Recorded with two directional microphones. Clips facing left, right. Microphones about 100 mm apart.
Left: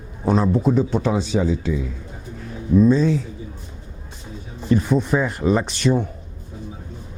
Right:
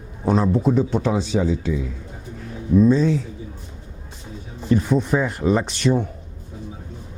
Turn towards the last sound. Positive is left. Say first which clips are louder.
# even
turn(degrees=10)  # may be behind; listen again after turning